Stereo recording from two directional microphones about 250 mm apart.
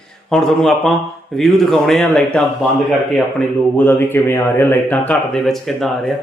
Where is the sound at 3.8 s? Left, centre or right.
Centre.